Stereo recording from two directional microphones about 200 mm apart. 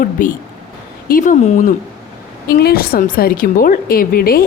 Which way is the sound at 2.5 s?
50° left (ahead or behind).